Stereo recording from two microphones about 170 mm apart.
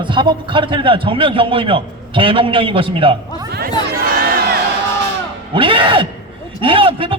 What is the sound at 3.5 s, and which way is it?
Crowd, 65° right (ahead or behind).